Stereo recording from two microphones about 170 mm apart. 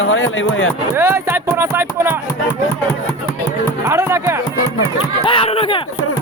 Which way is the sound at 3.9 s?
15° right (ahead or behind).